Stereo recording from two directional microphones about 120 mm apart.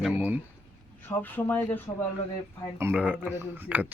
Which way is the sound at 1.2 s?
15° left (ahead or behind).